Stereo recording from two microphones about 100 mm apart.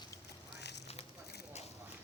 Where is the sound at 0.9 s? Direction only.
90° left.